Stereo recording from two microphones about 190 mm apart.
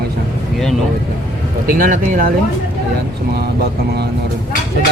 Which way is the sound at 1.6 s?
50° right (ahead or behind).